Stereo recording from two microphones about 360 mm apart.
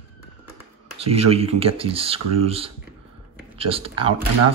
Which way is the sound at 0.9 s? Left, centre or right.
Centre.